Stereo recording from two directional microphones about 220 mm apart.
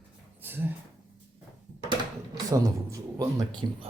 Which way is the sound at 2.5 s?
15° right (ahead or behind).